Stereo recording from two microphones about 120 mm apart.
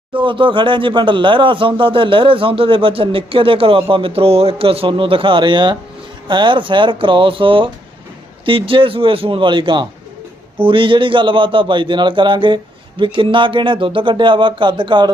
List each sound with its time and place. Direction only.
0.2 s speech: 45° right (ahead or behind)